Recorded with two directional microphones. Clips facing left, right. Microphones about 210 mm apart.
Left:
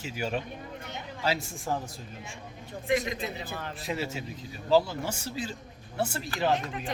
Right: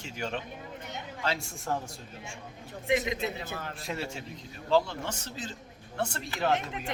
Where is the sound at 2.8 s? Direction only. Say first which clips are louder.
Even; 20° right (ahead or behind).